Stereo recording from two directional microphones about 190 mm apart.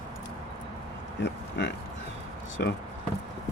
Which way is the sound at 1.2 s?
65° left (ahead or behind).